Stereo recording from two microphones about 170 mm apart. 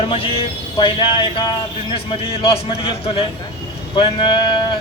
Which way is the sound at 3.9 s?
30° left (ahead or behind).